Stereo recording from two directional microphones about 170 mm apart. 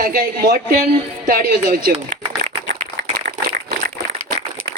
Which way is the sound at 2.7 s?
60° right (ahead or behind).